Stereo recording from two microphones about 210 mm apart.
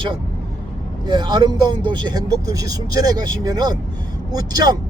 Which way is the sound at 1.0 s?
20° right (ahead or behind).